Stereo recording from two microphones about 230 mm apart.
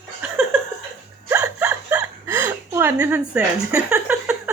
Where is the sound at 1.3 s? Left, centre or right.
Centre.